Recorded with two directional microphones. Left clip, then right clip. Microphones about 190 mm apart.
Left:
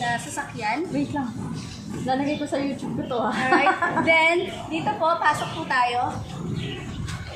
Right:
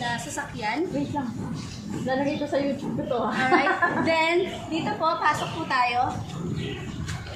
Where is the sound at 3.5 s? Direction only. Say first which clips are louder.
Left 3 dB; 10° left (ahead or behind).